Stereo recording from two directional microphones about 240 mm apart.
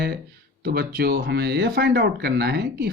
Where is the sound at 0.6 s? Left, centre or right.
Right.